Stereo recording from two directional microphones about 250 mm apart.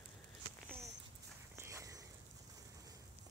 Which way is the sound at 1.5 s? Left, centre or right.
Centre.